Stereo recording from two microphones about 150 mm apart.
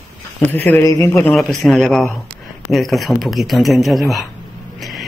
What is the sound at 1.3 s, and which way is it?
Speech, centre (ahead or behind).